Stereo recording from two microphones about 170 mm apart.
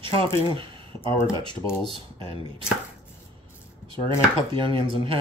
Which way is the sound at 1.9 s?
30° right (ahead or behind).